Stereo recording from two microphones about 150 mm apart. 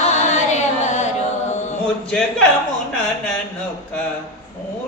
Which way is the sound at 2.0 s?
5° left (ahead or behind).